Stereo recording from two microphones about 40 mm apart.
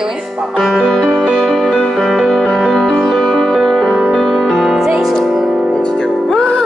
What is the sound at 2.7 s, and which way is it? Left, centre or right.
Music, centre.